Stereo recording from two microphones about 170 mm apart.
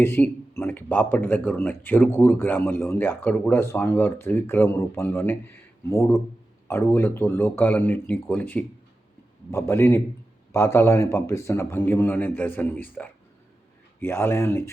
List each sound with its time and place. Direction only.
0.0 s speech: 15° left (ahead or behind)